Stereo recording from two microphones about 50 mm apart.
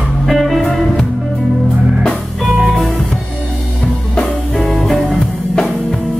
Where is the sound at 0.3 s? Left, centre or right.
Centre.